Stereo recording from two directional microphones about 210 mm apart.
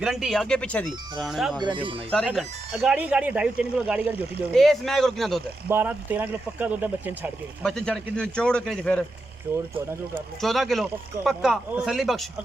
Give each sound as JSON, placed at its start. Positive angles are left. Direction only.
{"t": 0.0, "sound": "speech", "side_deg": 0}
{"t": 1.5, "sound": "speech", "side_deg": -20}
{"t": 2.0, "sound": "speech", "side_deg": 5}
{"t": 7.6, "sound": "speech", "side_deg": 5}
{"t": 10.4, "sound": "speech", "side_deg": 0}